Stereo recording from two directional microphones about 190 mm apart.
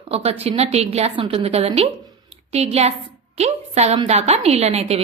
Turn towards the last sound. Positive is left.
turn(degrees=-35)  # may be behind; listen again after turning